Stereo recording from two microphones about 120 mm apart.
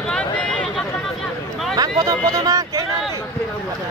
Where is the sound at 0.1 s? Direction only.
10° left (ahead or behind).